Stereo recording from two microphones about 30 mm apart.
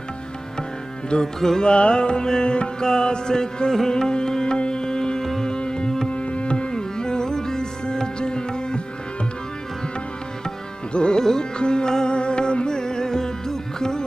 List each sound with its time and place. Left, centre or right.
1.2 s music: centre
1.6 s music: left
6.0 s music: left
10.9 s music: left